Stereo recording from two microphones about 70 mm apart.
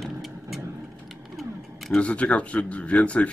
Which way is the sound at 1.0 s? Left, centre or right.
Centre.